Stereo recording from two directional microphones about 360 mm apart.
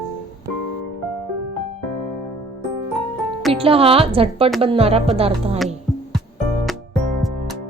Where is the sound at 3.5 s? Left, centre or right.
Centre.